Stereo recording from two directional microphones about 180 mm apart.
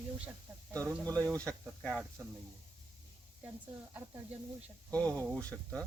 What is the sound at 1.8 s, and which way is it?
Speech, 5° right (ahead or behind).